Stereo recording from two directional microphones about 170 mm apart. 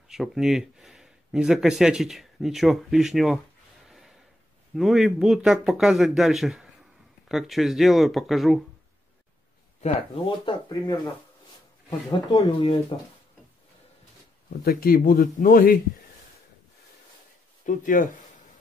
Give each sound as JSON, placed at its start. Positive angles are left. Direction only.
{"t": 0.1, "sound": "speech", "side_deg": 0}
{"t": 3.8, "sound": "gasp", "side_deg": 0}
{"t": 4.7, "sound": "speech", "side_deg": 0}
{"t": 9.8, "sound": "speech", "side_deg": 30}
{"t": 12.1, "sound": "speech", "side_deg": 25}
{"t": 14.6, "sound": "speech", "side_deg": 60}
{"t": 17.6, "sound": "speech", "side_deg": 55}